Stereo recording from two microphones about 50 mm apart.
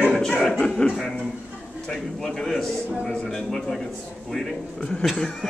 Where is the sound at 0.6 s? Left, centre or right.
Centre.